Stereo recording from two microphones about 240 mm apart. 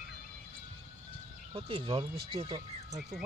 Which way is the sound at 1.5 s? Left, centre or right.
Right.